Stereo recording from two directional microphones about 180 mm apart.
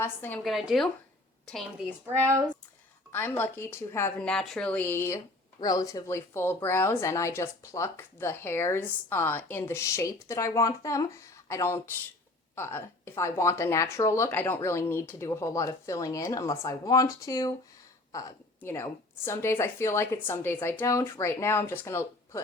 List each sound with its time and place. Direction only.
0.0 s speech: 10° left (ahead or behind)
0.4 s a woman's voice: centre (ahead or behind)
2.2 s speech: 15° right (ahead or behind)
3.1 s speech: 10° left (ahead or behind)